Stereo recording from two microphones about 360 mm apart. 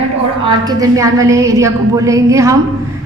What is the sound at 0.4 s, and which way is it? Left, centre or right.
A woman's voice, centre.